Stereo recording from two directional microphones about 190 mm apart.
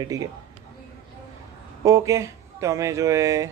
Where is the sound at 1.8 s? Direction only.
15° right (ahead or behind).